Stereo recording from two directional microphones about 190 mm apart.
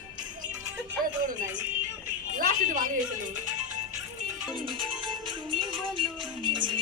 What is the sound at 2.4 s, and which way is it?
Speech, 45° right (ahead or behind).